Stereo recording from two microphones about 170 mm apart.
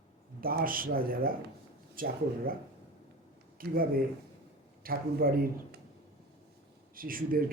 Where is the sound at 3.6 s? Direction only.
60° right (ahead or behind).